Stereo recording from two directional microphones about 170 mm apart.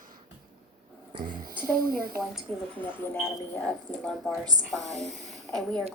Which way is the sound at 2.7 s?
10° left (ahead or behind).